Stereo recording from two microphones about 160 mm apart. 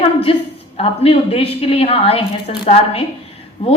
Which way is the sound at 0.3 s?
35° left (ahead or behind).